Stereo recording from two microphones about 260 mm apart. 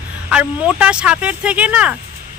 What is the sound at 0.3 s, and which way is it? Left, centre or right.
Speech, centre.